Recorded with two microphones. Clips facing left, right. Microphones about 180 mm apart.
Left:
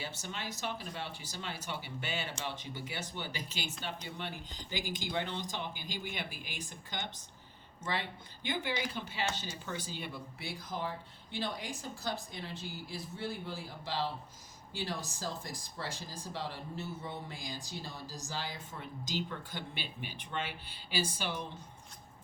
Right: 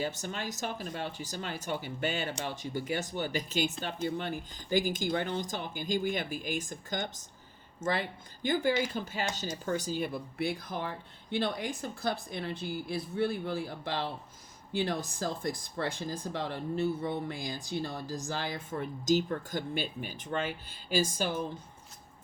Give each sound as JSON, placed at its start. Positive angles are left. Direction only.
{"t": 0.0, "sound": "speech", "side_deg": -45}